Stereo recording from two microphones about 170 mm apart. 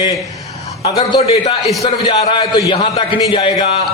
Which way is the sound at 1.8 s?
35° left (ahead or behind).